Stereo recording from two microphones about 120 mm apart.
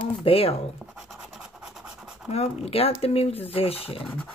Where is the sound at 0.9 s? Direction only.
5° right (ahead or behind).